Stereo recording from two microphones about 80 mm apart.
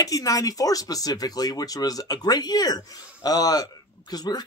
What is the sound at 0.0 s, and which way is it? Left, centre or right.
Speech, left.